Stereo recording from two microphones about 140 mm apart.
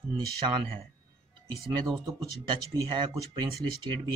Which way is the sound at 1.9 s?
25° right (ahead or behind).